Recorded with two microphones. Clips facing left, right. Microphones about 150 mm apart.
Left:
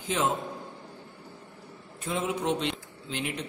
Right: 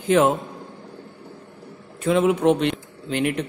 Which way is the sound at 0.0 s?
60° right (ahead or behind).